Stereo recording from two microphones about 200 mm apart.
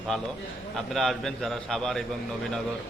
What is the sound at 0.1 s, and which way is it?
Speech, 5° left (ahead or behind).